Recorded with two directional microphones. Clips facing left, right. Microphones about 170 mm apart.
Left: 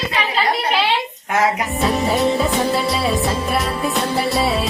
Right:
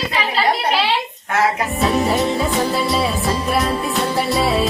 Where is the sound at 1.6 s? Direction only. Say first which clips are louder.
Right 1 dB; centre (ahead or behind).